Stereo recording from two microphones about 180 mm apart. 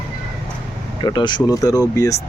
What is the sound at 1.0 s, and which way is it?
Speech, 25° left (ahead or behind).